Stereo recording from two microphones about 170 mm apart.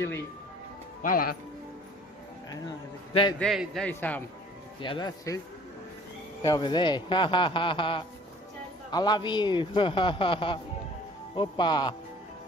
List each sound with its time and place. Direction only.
1.0 s speech: 55° left (ahead or behind)
3.3 s a man's voice: centre (ahead or behind)
4.7 s a man's voice: 30° left (ahead or behind)
6.4 s a man's voice: 25° left (ahead or behind)